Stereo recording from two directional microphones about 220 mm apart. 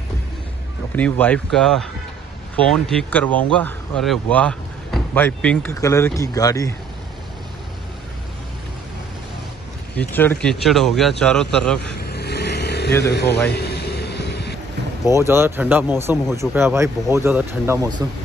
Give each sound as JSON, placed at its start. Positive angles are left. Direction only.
{"t": 0.9, "sound": "speech", "side_deg": 5}
{"t": 9.9, "sound": "speech", "side_deg": 10}
{"t": 12.0, "sound": "vehicle", "side_deg": 45}
{"t": 13.1, "sound": "a man's voice", "side_deg": 50}
{"t": 13.5, "sound": "air conditioning", "side_deg": 45}
{"t": 15.0, "sound": "speech", "side_deg": -10}